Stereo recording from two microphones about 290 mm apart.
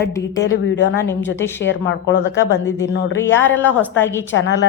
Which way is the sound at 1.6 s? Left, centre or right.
Left.